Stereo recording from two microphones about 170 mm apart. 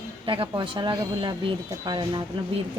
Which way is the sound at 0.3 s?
30° right (ahead or behind).